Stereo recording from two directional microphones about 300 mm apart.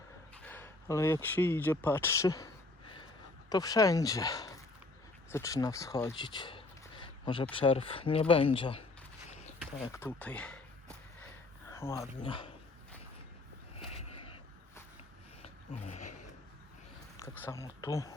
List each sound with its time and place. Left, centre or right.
0.4 s speech: centre
3.5 s speech: centre
9.8 s speech: centre
15.9 s a sound: left
17.2 s speech: centre